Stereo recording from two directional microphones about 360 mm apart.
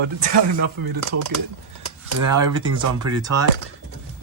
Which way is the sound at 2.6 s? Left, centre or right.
Centre.